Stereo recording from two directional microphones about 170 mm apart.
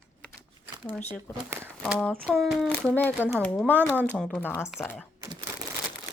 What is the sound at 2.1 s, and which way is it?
Speech, 10° right (ahead or behind).